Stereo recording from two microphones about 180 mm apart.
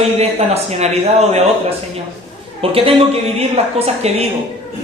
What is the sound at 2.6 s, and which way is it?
A man's voice, 30° right (ahead or behind).